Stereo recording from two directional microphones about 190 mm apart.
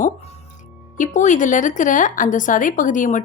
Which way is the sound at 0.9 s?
40° left (ahead or behind).